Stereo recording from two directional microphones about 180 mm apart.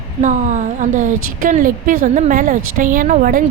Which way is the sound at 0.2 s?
45° right (ahead or behind).